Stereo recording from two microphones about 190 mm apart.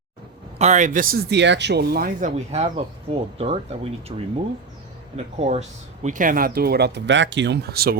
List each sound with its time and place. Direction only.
0.6 s speech: 40° right (ahead or behind); by 7.9 s 55° right (ahead or behind)